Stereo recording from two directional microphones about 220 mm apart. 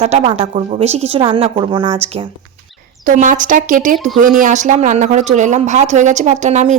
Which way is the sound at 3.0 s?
35° right (ahead or behind).